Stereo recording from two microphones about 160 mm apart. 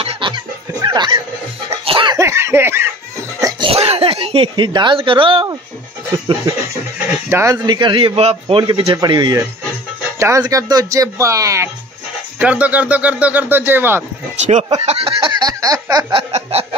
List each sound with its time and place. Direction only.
0.0 s snicker: 35° right (ahead or behind)
0.8 s speech: 30° right (ahead or behind)
1.9 s cough: 30° right (ahead or behind)
2.1 s laughter: 15° right (ahead or behind)
3.3 s cough: 25° right (ahead or behind)
3.7 s speech: 40° right (ahead or behind)
7.2 s a sound: 15° right (ahead or behind); by 8.9 s 35° right (ahead or behind)
8.9 s speech: 25° right (ahead or behind)
12.4 s speech: 10° right (ahead or behind)
14.4 s speech: 45° right (ahead or behind)
14.9 s a sound: 35° right (ahead or behind)